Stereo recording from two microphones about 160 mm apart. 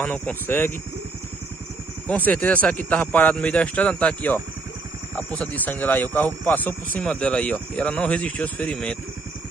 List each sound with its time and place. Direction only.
0.0 s speech: 10° left (ahead or behind)
2.0 s speech: 10° left (ahead or behind)